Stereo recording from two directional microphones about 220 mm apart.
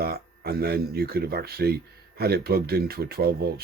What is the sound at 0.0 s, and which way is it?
Speech, 45° right (ahead or behind).